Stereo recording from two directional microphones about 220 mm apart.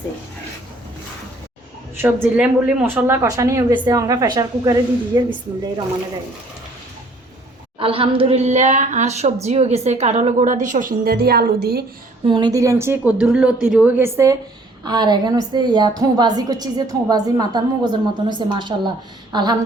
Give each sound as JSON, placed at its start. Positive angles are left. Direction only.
{"t": 2.2, "sound": "a woman's voice", "side_deg": -5}
{"t": 7.8, "sound": "speech", "side_deg": -25}
{"t": 12.2, "sound": "a woman's voice", "side_deg": -20}